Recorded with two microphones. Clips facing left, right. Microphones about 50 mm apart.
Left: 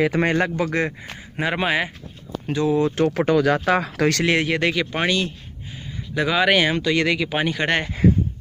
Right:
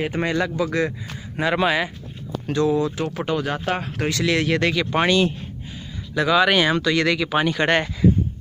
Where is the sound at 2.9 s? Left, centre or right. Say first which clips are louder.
Left 6 dB; left.